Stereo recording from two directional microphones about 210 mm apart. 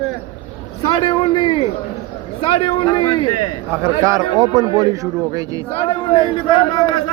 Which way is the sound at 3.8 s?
15° right (ahead or behind).